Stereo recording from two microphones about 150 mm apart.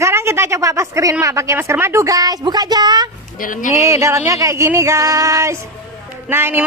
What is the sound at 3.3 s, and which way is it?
Speech, 65° left (ahead or behind).